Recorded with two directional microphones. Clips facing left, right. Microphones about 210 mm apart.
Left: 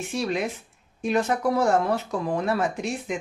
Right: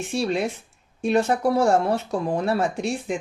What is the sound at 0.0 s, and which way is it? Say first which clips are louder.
Speech: right 3 dB; 30° right (ahead or behind).